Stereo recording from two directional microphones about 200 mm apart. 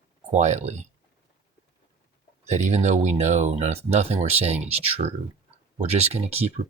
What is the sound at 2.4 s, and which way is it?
Speech, 35° right (ahead or behind).